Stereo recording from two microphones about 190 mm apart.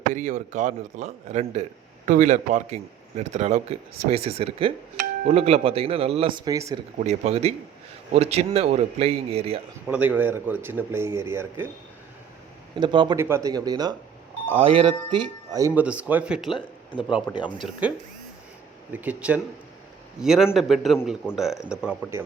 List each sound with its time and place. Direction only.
0.1 s speech: 45° right (ahead or behind); by 6.7 s 20° right (ahead or behind)
7.0 s speech: 35° right (ahead or behind)
9.8 s speech: 10° right (ahead or behind)
12.7 s speech: 25° right (ahead or behind)
13.1 s a man's voice: 15° right (ahead or behind)
18.9 s a man's voice: 10° right (ahead or behind)